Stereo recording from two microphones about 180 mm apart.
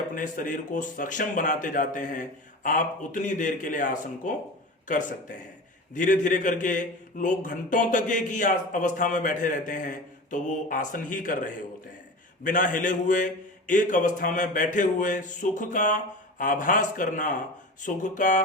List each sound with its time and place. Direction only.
0.1 s a man's voice: 50° left (ahead or behind)